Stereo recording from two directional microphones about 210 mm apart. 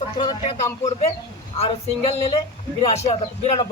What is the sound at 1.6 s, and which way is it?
Speech, 30° left (ahead or behind).